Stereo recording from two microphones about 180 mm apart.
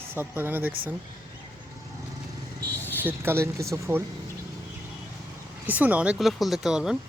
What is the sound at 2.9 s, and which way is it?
Speech, 10° right (ahead or behind).